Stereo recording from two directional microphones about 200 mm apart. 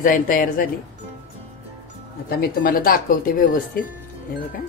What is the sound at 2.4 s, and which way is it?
Speech, 45° left (ahead or behind).